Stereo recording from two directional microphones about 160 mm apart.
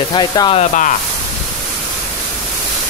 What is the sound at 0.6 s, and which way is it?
Speech, 50° left (ahead or behind).